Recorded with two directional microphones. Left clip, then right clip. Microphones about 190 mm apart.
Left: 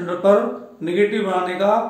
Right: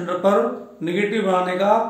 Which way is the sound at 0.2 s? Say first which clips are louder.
Left 3 dB; 25° right (ahead or behind).